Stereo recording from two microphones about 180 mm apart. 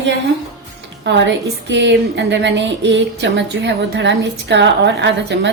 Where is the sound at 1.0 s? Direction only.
80° right.